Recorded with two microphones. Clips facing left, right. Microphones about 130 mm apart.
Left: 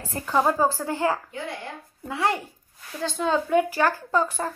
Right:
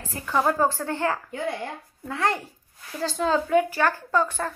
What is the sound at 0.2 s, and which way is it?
Speech, 35° left (ahead or behind).